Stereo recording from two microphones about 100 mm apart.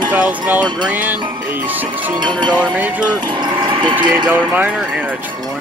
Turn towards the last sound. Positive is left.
turn(degrees=-20)  # may be behind; listen again after turning